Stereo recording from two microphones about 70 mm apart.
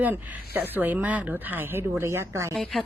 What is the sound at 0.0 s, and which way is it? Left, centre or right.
Speech, right.